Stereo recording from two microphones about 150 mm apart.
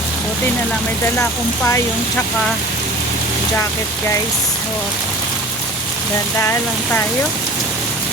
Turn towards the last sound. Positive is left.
turn(degrees=15)  # may be behind; listen again after turning